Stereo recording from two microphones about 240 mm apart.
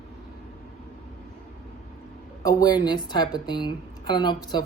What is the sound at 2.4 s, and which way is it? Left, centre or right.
Speech, centre.